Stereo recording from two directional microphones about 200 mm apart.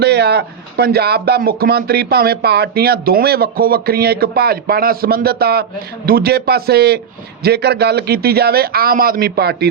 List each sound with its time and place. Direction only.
0.0 s speech: 55° right (ahead or behind)